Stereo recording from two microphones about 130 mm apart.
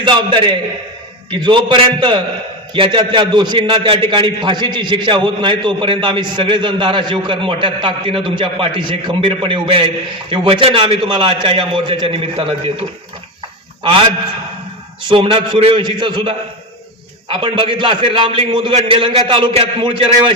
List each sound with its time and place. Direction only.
0.0 s a man's voice: 40° right (ahead or behind)
15.1 s a man's voice: 40° right (ahead or behind)